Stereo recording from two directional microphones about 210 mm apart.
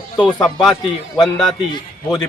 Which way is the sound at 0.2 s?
20° left (ahead or behind).